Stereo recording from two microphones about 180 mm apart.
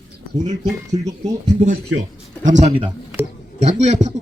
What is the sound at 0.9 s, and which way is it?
Speech, 20° right (ahead or behind).